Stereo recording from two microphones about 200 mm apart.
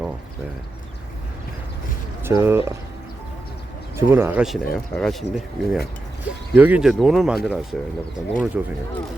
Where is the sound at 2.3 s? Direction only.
10° right (ahead or behind).